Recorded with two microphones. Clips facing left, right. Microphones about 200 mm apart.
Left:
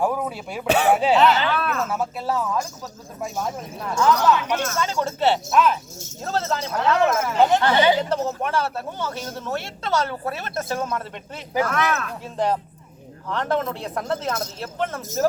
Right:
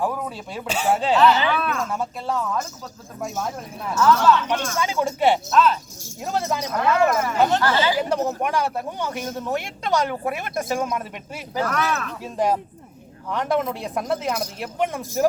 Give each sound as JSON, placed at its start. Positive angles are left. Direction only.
{"t": 0.0, "sound": "speech", "side_deg": 10}
{"t": 0.7, "sound": "speech", "side_deg": 65}
{"t": 1.1, "sound": "speech", "side_deg": 20}
{"t": 1.5, "sound": "speech", "side_deg": 0}
{"t": 4.0, "sound": "speech", "side_deg": 20}
{"t": 4.7, "sound": "speech", "side_deg": -10}
{"t": 5.5, "sound": "speech", "side_deg": 15}
{"t": 6.2, "sound": "speech", "side_deg": -15}
{"t": 7.1, "sound": "speech", "side_deg": 5}
{"t": 7.4, "sound": "speech", "side_deg": 20}
{"t": 7.9, "sound": "speech", "side_deg": -15}
{"t": 11.6, "sound": "speech", "side_deg": 0}
{"t": 12.2, "sound": "speech", "side_deg": -10}